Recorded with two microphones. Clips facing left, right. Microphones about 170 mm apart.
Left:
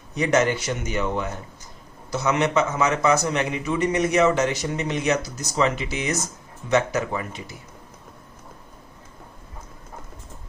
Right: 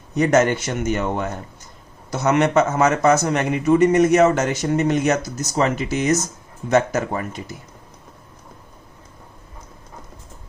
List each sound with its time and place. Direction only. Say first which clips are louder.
0.2 s speech: right 4 dB; 45° right (ahead or behind)